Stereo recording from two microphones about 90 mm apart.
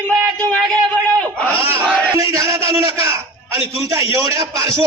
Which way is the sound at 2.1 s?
35° right (ahead or behind).